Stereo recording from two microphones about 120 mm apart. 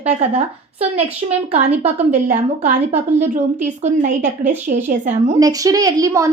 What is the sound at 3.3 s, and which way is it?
A woman's voice, 85° right.